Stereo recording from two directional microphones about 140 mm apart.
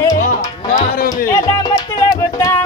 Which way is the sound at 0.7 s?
90° left.